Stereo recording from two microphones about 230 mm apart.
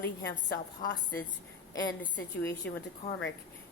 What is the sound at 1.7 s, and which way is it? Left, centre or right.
A woman's voice, centre.